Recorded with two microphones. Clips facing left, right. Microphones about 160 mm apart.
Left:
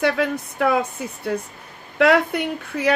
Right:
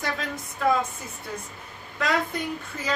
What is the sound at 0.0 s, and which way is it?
Speech, 70° left (ahead or behind).